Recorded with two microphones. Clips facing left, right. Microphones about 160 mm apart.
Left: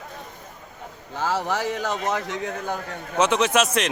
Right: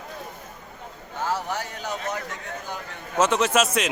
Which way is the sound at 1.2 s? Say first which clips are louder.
Left 3 dB; 90° left.